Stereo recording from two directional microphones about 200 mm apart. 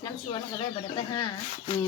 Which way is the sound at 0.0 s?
20° left (ahead or behind).